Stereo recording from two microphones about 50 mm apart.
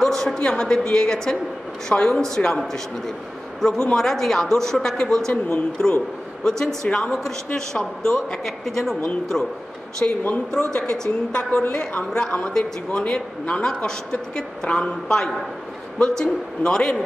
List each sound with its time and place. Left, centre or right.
0.0 s a sound: centre
0.4 s a woman's voice: centre
3.6 s speech: centre
5.3 s speech: left
6.8 s speech: centre
10.0 s a woman's voice: left